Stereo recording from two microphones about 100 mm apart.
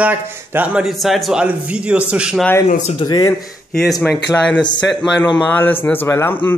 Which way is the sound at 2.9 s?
45° left (ahead or behind).